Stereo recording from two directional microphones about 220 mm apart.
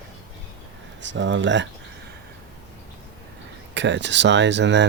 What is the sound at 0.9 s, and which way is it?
Speech, 55° right (ahead or behind).